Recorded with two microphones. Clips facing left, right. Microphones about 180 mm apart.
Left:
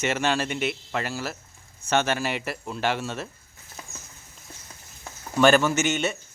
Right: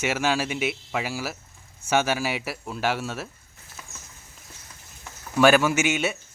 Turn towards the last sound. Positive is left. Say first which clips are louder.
# right 1 dB
turn(degrees=-10)  # may be behind; listen again after turning